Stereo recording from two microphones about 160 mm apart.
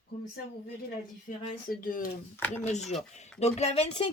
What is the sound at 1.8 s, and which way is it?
Speech, 60° left (ahead or behind).